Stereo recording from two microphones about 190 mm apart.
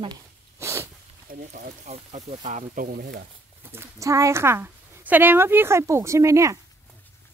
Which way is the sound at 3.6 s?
10° right (ahead or behind).